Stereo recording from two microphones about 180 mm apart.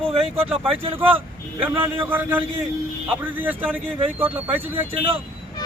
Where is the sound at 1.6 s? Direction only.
10° right (ahead or behind).